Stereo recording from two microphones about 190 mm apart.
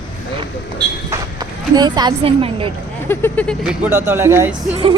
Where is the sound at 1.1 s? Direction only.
20° right (ahead or behind).